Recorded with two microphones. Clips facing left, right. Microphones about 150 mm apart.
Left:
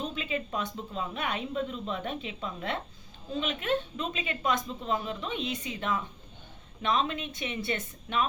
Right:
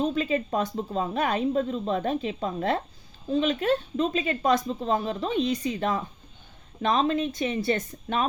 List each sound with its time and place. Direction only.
0.0 s speech: 40° right (ahead or behind)